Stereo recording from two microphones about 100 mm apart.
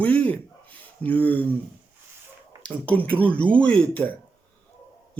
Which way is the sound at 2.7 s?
15° left (ahead or behind).